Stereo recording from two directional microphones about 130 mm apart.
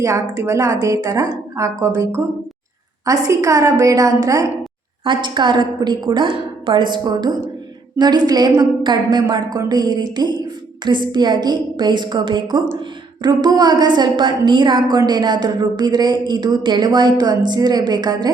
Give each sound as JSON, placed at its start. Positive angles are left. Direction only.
{"t": 0.0, "sound": "a woman's voice", "side_deg": -25}
{"t": 5.0, "sound": "a woman's voice", "side_deg": -35}